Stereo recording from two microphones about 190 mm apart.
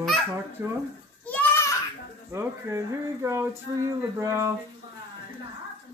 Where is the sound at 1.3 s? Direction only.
10° left (ahead or behind).